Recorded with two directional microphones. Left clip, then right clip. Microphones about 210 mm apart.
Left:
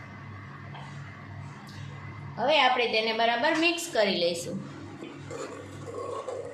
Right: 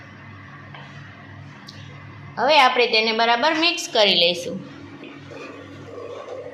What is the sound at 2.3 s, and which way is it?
A woman's voice, 15° right (ahead or behind).